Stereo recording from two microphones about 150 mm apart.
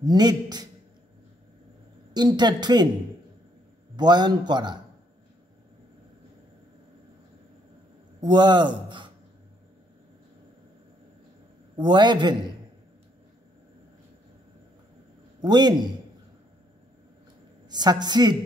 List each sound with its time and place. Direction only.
0.0 s speech: 25° right (ahead or behind)
2.1 s speech: 30° right (ahead or behind)
3.9 s speech: 30° right (ahead or behind)
8.2 s speech: 30° right (ahead or behind)
11.7 s a man's voice: 30° right (ahead or behind)
15.4 s speech: 30° right (ahead or behind)
17.6 s speech: 30° right (ahead or behind)